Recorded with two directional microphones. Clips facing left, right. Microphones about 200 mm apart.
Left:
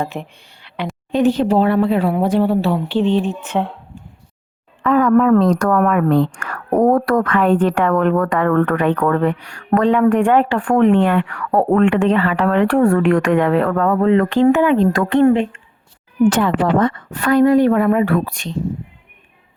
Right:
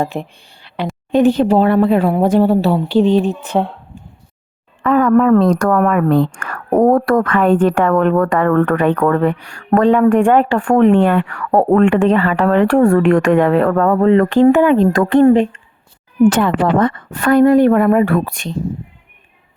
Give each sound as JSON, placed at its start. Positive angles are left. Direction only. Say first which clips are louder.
{"t": 0.0, "sound": "speech", "louder": "right 4 dB", "side_deg": -35}
{"t": 1.1, "sound": "a woman's voice", "louder": "right 3 dB", "side_deg": -50}
{"t": 4.8, "sound": "a sound", "louder": "right 1 dB", "side_deg": -50}
{"t": 5.4, "sound": "a woman's voice", "louder": "right 2 dB", "side_deg": -55}
{"t": 16.3, "sound": "a woman's voice", "louder": "right 2 dB", "side_deg": -55}